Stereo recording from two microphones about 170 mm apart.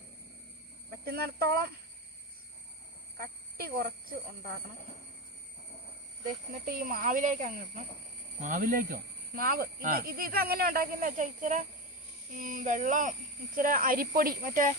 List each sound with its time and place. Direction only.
1.0 s speech: 65° right (ahead or behind)
3.2 s speech: 60° right (ahead or behind)
6.7 s speech: 55° right (ahead or behind)